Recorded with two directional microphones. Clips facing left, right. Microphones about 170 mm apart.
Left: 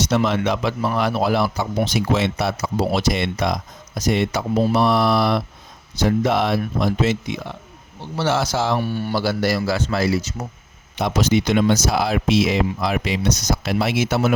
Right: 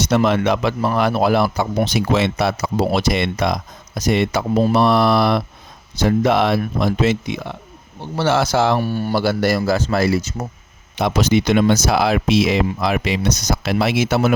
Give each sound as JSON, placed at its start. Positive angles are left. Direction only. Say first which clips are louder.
{"t": 0.0, "sound": "speech", "louder": "right 3 dB", "side_deg": -55}
{"t": 4.7, "sound": "speech", "louder": "right 3 dB", "side_deg": -80}
{"t": 8.8, "sound": "speech", "louder": "right 3 dB", "side_deg": -40}
{"t": 10.9, "sound": "speech", "louder": "right 2 dB", "side_deg": -75}